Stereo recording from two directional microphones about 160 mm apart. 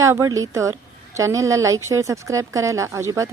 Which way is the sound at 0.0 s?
20° right (ahead or behind).